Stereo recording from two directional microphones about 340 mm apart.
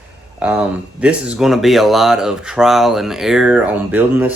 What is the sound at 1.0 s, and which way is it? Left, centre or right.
Speech, centre.